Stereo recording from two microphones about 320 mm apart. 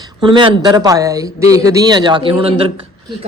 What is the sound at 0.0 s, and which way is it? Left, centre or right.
Speech, centre.